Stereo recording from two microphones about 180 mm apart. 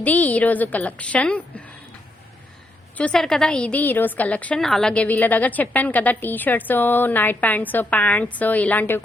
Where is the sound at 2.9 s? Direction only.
5° left (ahead or behind).